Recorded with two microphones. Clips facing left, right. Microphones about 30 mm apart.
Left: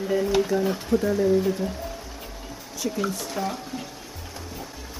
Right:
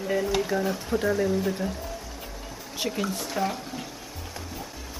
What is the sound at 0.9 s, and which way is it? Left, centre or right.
Speech, centre.